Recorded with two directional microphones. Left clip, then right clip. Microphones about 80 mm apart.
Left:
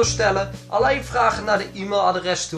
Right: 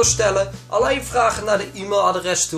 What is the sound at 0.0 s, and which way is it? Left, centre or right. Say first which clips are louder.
Speech: right 2 dB; right.